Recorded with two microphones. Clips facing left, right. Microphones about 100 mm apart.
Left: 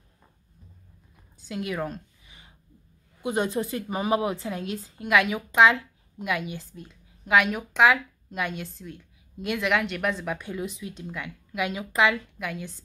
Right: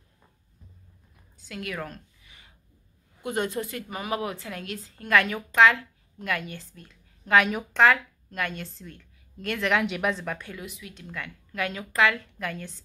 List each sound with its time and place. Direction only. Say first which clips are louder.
1.4 s a sound: left 4 dB; 20° left (ahead or behind)
3.2 s speech: left 2 dB; 20° left (ahead or behind)
7.2 s a woman's voice: even; 5° left (ahead or behind)
10.4 s a woman's voice: left 7 dB; 25° left (ahead or behind)
12.4 s a woman's voice: even; 5° left (ahead or behind)